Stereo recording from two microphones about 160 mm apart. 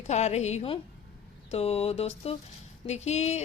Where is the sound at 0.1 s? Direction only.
45° left (ahead or behind).